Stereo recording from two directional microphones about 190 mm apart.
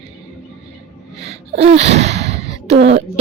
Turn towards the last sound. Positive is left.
turn(degrees=-35)  # may be behind; listen again after turning